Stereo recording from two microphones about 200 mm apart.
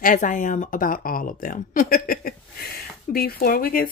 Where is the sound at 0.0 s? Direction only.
40° left (ahead or behind).